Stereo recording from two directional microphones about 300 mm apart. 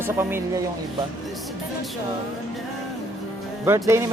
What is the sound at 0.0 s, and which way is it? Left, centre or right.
Speech, centre.